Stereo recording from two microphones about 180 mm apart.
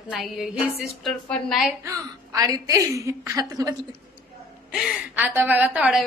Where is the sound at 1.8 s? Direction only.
20° right (ahead or behind).